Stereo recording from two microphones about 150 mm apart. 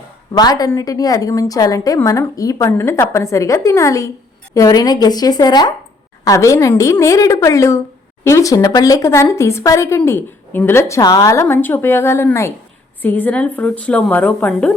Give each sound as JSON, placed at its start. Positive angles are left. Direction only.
{"t": 0.3, "sound": "a woman's voice", "side_deg": 25}